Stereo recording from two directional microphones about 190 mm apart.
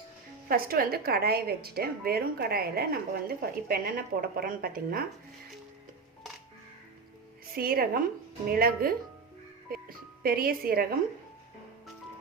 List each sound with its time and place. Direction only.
0.4 s a woman's voice: 50° right (ahead or behind)
7.5 s a woman's voice: 50° right (ahead or behind)
9.7 s music: 50° right (ahead or behind)
10.2 s a woman's voice: 50° right (ahead or behind)